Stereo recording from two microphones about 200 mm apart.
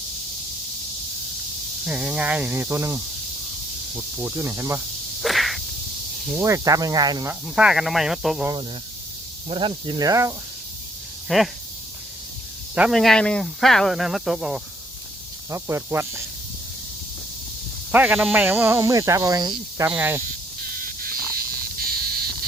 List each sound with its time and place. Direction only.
1.9 s speech: 5° right (ahead or behind)
4.2 s speech: 10° right (ahead or behind)
5.2 s a sound: centre (ahead or behind)
6.3 s speech: 15° right (ahead or behind)
7.4 s speech: 5° right (ahead or behind)
9.5 s speech: 25° right (ahead or behind)
11.3 s speech: centre (ahead or behind)
12.7 s speech: 5° right (ahead or behind)
15.4 s speech: 15° right (ahead or behind)
17.9 s speech: 10° right (ahead or behind)
20.8 s frog: 45° right (ahead or behind)